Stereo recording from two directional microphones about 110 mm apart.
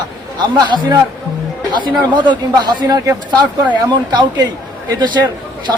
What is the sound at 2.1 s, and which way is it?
A man's voice, 40° right (ahead or behind).